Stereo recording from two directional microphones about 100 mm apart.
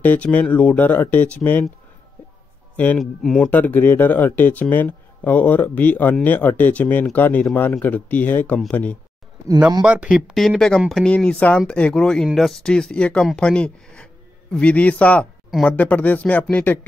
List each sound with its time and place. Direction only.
0.0 s speech: 15° left (ahead or behind)
2.7 s a man's voice: 15° left (ahead or behind)
3.0 s speech: centre (ahead or behind)
3.4 s speech: 15° left (ahead or behind)
9.8 s speech: 10° right (ahead or behind)
11.1 s speech: 10° left (ahead or behind)